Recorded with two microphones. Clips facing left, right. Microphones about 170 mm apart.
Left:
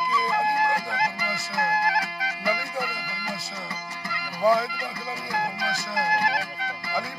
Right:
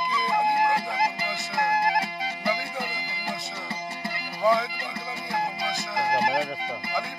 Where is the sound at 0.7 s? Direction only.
25° right (ahead or behind).